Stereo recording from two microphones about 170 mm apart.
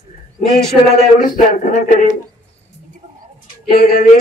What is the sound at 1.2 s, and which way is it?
Speech, 50° left (ahead or behind).